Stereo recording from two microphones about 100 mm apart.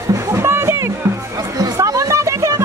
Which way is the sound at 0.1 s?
30° right (ahead or behind).